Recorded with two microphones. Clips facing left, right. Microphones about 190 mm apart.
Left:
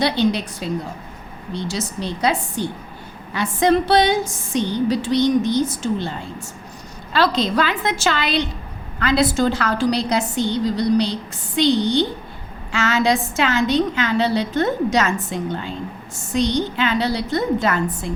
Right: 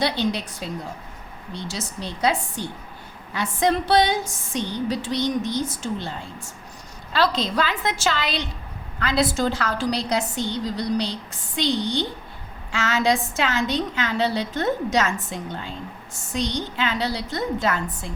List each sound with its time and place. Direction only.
0.0 s a woman's voice: 75° left (ahead or behind)